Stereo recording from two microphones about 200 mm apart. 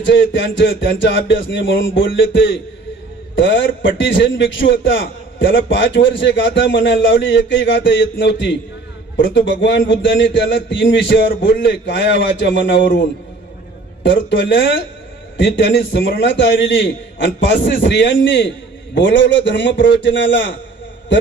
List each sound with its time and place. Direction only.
0.0 s a man's voice: 65° left (ahead or behind)
14.0 s a man's voice: 65° left (ahead or behind)